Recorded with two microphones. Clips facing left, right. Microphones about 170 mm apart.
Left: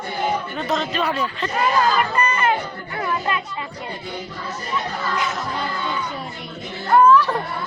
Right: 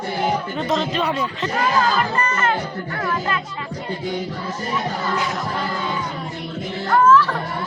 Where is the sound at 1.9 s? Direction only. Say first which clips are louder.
Left 1 dB; 15° left (ahead or behind).